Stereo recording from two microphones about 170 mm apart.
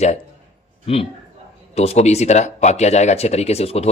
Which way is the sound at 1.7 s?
40° left (ahead or behind).